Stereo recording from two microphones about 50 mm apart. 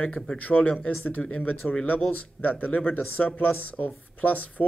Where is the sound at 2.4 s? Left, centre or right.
Left.